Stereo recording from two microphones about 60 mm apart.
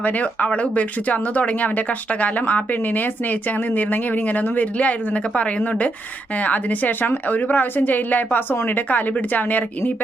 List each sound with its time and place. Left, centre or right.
0.0 s speech: left